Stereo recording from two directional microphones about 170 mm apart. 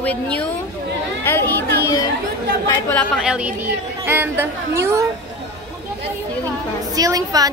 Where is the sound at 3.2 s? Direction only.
5° right (ahead or behind).